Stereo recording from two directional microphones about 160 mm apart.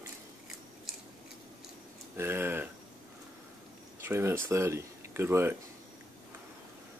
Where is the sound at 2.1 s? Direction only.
15° right (ahead or behind).